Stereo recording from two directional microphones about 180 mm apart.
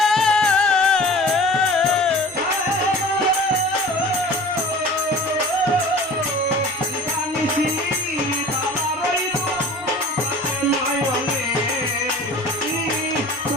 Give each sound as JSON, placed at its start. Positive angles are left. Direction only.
{"t": 0.0, "sound": "music", "side_deg": 0}